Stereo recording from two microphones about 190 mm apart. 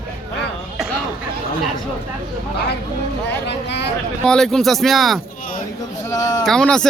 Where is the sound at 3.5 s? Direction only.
65° left (ahead or behind).